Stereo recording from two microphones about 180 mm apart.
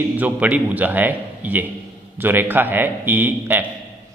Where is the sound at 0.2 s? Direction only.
10° right (ahead or behind).